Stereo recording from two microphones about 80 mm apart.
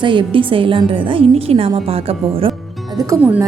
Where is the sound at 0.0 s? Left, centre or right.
Right.